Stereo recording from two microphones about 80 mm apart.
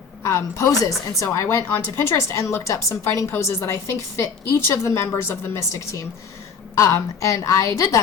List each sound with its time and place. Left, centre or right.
0.2 s a woman's voice: left